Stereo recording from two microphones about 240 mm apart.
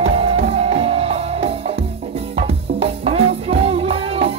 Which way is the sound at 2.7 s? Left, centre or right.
Right.